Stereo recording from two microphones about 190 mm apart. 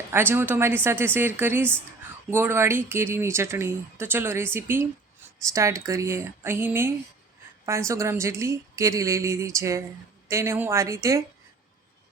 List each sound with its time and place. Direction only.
0.1 s speech: 10° right (ahead or behind)